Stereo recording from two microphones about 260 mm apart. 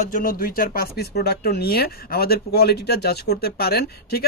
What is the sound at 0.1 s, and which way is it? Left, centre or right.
A man's voice, left.